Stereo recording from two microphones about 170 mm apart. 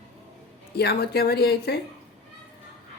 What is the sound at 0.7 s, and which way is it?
Speech, 70° left (ahead or behind).